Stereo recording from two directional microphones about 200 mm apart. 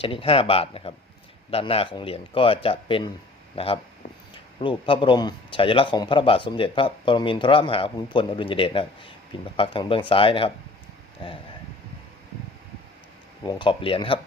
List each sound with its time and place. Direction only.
0.0 s a man's voice: 25° left (ahead or behind)
13.4 s a man's voice: 20° left (ahead or behind)